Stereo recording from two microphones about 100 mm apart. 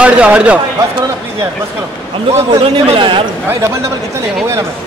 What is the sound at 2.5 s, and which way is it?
Speech, 60° right (ahead or behind).